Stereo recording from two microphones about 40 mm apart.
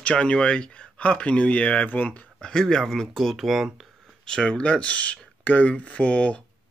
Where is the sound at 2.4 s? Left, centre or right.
Centre.